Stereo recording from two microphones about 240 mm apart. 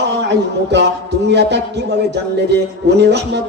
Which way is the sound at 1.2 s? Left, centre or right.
Right.